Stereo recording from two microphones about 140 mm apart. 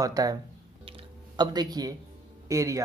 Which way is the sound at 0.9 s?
35° right (ahead or behind).